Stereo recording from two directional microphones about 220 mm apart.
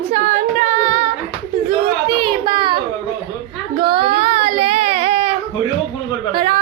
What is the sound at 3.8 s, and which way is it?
Child singing, 25° right (ahead or behind).